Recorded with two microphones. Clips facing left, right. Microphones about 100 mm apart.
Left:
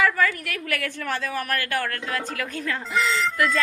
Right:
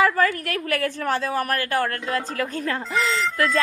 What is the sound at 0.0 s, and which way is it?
A woman's voice, 40° right (ahead or behind).